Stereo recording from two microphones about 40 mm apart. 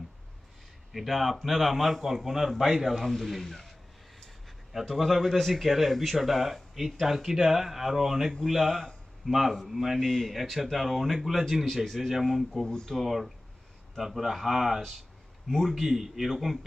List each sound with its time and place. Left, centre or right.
0.9 s a man's voice: centre
4.7 s a man's voice: centre
8.6 s speech: centre
9.2 s a man's voice: centre
10.0 s speech: centre
10.3 s a man's voice: centre
12.6 s speech: centre
13.0 s a man's voice: centre